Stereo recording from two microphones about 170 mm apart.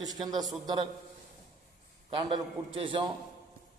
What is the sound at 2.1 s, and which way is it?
Speech, 30° right (ahead or behind).